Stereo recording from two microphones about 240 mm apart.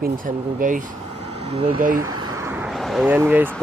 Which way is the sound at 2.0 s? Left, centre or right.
Centre.